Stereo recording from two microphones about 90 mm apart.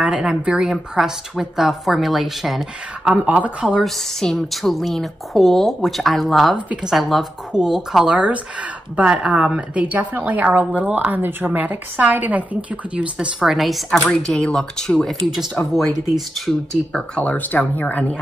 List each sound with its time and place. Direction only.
0.0 s a woman's voice: 5° right (ahead or behind)
3.1 s speech: 15° right (ahead or behind)
3.6 s a woman's voice: centre (ahead or behind)
6.5 s speech: 15° right (ahead or behind)
6.9 s a woman's voice: centre (ahead or behind); by 18.2 s 15° left (ahead or behind)